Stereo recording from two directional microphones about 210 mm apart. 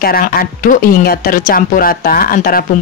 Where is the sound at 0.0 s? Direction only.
45° left (ahead or behind).